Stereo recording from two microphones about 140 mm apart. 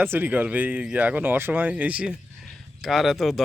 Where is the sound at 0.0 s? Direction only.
15° right (ahead or behind).